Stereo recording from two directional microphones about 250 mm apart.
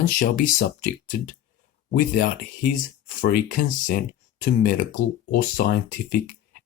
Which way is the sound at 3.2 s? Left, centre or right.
Left.